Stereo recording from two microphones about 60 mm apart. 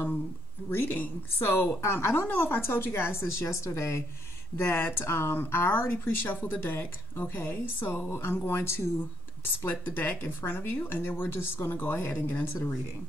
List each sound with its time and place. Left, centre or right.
0.7 s a woman's voice: left